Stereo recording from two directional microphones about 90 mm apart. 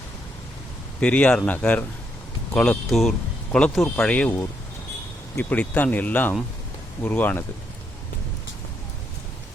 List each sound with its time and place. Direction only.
0.9 s speech: 15° left (ahead or behind)
3.9 s speech: 15° left (ahead or behind)